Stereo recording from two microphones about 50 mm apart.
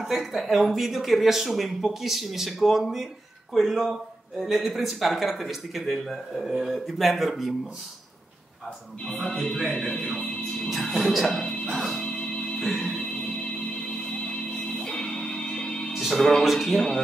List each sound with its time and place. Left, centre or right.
0.0 s speech: centre
9.1 s speech: centre
11.6 s music: centre
12.0 s music: centre
15.9 s music: centre
16.4 s speech: centre